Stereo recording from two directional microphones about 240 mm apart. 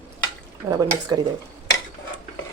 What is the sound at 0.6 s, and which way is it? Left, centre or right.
Stir, centre.